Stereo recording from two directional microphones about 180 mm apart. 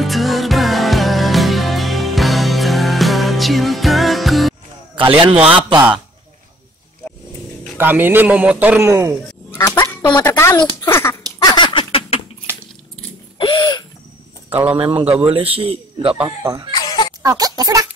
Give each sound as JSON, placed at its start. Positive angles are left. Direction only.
{"t": 0.0, "sound": "music", "side_deg": 0}
{"t": 4.9, "sound": "a man's voice", "side_deg": -30}
{"t": 7.7, "sound": "a man's voice", "side_deg": -10}
{"t": 9.5, "sound": "a sound", "side_deg": 15}
{"t": 10.2, "sound": "speech", "side_deg": 15}
{"t": 10.8, "sound": "a sound", "side_deg": 15}
{"t": 13.4, "sound": "a sound", "side_deg": 25}
{"t": 14.5, "sound": "a man's voice", "side_deg": -10}
{"t": 15.3, "sound": "a man's voice", "side_deg": -30}
{"t": 16.3, "sound": "a man's voice", "side_deg": -20}
{"t": 16.7, "sound": "a sound", "side_deg": 25}
{"t": 17.2, "sound": "speech", "side_deg": -20}